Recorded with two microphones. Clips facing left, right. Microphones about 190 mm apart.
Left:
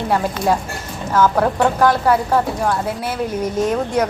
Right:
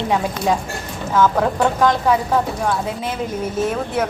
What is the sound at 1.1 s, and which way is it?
A woman's voice, 5° left (ahead or behind).